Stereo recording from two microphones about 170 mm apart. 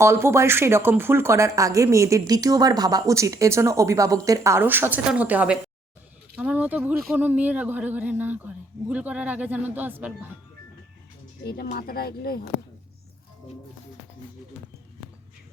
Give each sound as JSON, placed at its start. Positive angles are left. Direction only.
{"t": 0.0, "sound": "speech", "side_deg": -15}
{"t": 11.4, "sound": "speech", "side_deg": 65}